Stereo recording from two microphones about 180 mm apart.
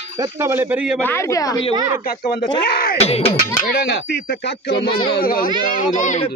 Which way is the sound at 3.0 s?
35° left (ahead or behind).